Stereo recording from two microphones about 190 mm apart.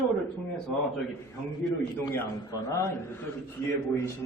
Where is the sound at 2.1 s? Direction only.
15° left (ahead or behind).